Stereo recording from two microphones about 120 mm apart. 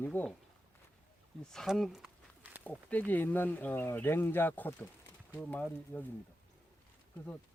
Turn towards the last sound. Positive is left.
turn(degrees=15)  # may be behind; listen again after turning